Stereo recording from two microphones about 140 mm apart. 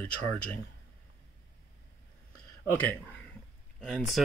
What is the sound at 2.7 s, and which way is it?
Speech, 10° left (ahead or behind).